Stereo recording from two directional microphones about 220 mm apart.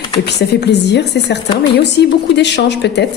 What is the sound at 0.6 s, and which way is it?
A woman's voice, 50° left (ahead or behind).